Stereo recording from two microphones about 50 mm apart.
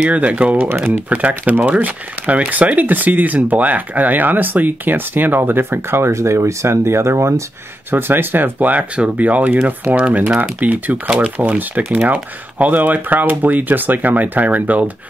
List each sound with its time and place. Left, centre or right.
0.0 s speech: right
0.7 s speech: right
1.1 s speech: right
7.9 s speech: right
8.5 s speech: right
9.8 s speech: right